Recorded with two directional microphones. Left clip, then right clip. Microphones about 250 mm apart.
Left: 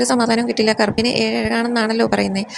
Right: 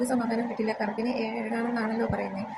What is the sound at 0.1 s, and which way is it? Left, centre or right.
A woman's voice, left.